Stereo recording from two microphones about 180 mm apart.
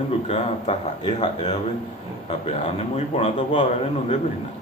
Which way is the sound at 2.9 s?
35° left (ahead or behind).